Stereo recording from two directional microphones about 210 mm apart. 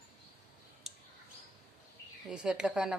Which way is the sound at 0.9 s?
Centre (ahead or behind).